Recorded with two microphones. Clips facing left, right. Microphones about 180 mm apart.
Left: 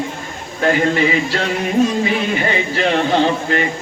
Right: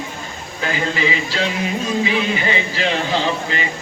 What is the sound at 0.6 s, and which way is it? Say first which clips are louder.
Music: left 6 dB; 55° left (ahead or behind).